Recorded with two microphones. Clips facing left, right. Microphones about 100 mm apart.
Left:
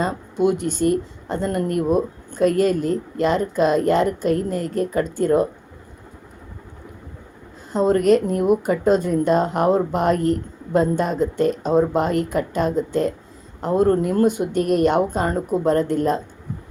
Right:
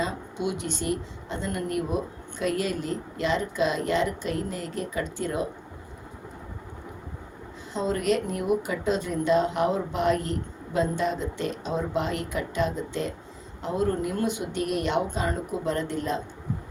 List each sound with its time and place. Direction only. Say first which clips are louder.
0.0 s a woman's voice: left 9 dB; 45° left (ahead or behind)
7.7 s a woman's voice: left 9 dB; 45° left (ahead or behind)